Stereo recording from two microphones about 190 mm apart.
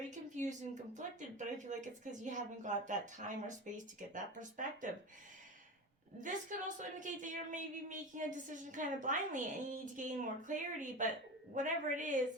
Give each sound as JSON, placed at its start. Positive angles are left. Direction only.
{"t": 0.1, "sound": "a sound", "side_deg": -40}
{"t": 0.9, "sound": "a woman's voice", "side_deg": -40}
{"t": 6.1, "sound": "a woman's voice", "side_deg": -40}